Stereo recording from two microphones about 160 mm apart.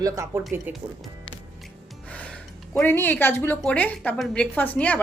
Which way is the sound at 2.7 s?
15° left (ahead or behind).